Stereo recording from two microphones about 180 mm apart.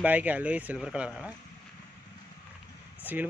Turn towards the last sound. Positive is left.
turn(degrees=-10)  # may be behind; listen again after turning